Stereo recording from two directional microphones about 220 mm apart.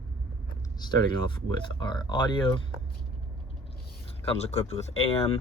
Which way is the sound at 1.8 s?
20° left (ahead or behind).